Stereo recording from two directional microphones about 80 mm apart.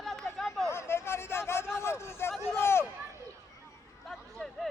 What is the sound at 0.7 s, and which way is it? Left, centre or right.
A man's voice, left.